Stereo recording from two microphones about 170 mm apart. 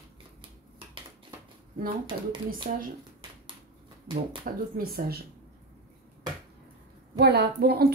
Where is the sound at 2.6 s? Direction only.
50° right (ahead or behind).